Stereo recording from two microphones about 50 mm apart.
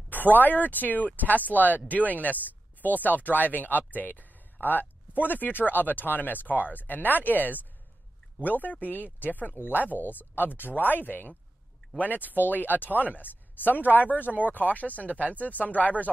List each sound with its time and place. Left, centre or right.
0.1 s speech: left